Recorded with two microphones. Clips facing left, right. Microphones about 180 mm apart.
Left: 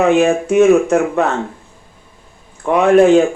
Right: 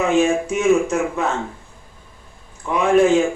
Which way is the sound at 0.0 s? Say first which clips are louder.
Left 5 dB; 60° left (ahead or behind).